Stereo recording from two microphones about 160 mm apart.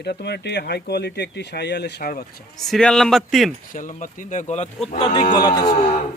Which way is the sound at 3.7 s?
55° left (ahead or behind).